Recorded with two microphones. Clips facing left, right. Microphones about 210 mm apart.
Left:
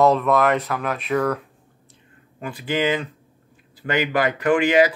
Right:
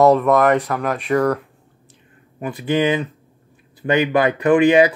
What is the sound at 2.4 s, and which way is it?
Speech, 20° right (ahead or behind).